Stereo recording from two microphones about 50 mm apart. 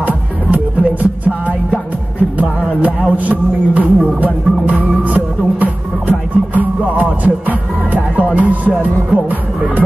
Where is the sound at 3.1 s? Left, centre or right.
Right.